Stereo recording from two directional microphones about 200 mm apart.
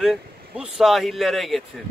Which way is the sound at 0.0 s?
Centre (ahead or behind).